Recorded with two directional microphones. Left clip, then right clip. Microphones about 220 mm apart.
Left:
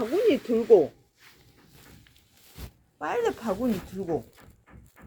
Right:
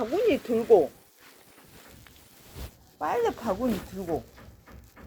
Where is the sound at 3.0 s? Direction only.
45° left (ahead or behind).